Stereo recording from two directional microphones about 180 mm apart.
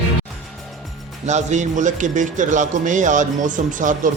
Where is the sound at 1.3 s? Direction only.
40° right (ahead or behind).